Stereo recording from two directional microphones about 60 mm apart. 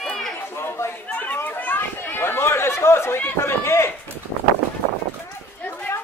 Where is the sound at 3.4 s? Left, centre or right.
Left.